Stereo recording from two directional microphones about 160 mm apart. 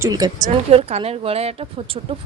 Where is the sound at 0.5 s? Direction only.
40° right (ahead or behind).